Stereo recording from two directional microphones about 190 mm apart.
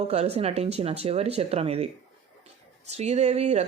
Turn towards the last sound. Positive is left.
turn(degrees=-35)  # may be behind; listen again after turning